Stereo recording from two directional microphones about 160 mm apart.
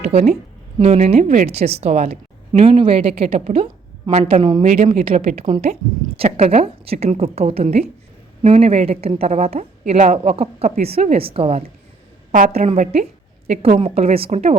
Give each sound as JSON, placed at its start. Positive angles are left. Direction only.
{"t": 0.0, "sound": "a woman's voice", "side_deg": -45}
{"t": 12.3, "sound": "a woman's voice", "side_deg": -60}
{"t": 12.5, "sound": "a woman's voice", "side_deg": -50}